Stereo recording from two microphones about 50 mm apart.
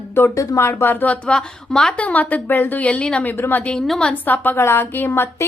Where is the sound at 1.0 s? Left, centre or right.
Left.